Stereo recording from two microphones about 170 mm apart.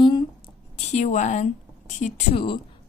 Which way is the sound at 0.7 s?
40° left (ahead or behind).